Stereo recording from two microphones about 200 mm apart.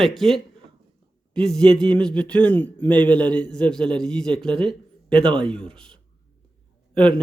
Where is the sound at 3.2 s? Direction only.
20° right (ahead or behind).